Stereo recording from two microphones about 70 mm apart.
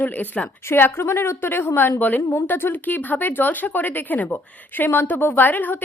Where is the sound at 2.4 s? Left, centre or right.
Left.